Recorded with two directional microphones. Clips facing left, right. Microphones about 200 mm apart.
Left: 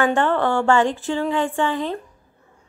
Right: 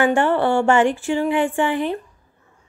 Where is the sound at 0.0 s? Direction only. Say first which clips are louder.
Right 2 dB; 15° right (ahead or behind).